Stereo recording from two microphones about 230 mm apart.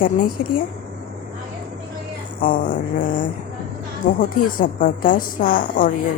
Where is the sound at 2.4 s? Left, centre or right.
Left.